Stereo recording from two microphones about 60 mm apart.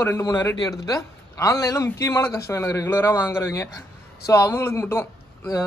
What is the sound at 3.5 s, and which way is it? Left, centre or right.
Speech, left.